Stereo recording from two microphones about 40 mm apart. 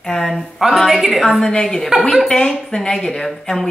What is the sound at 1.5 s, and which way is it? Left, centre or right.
A woman's voice, centre.